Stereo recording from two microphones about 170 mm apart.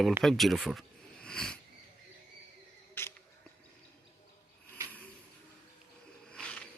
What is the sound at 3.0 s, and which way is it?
Rodents, 15° left (ahead or behind).